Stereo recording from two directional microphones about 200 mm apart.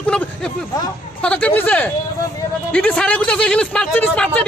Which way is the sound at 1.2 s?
5° left (ahead or behind).